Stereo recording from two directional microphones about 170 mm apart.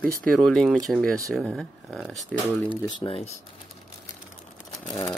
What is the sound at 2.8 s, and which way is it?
Speech, 30° left (ahead or behind).